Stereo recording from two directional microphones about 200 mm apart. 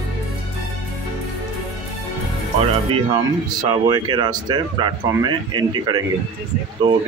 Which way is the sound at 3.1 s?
20° right (ahead or behind).